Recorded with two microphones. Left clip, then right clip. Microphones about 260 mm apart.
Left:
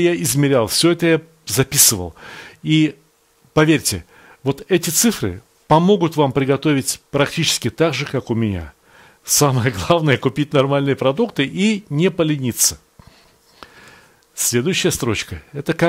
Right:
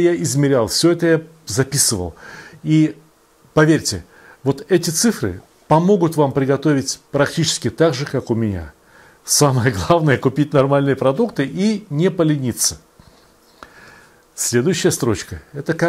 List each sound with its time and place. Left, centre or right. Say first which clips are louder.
0.0 s speech: right 1 dB; left
3.5 s speech: right 1 dB; left
12.1 s speech: right 4 dB; left